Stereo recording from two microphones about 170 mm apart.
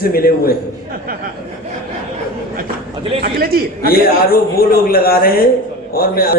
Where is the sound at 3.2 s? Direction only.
60° right (ahead or behind).